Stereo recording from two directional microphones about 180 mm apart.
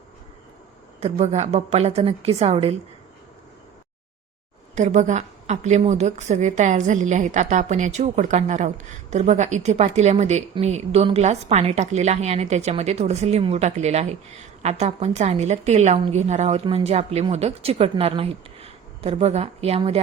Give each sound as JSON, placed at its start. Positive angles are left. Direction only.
{"t": 0.9, "sound": "a woman's voice", "side_deg": -40}
{"t": 4.7, "sound": "a woman's voice", "side_deg": -40}